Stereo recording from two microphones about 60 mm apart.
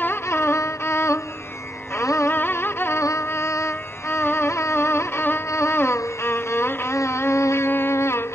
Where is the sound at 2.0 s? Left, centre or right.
Left.